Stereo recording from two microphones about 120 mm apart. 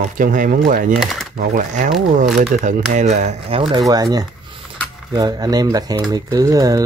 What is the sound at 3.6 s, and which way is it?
Speech, 45° right (ahead or behind).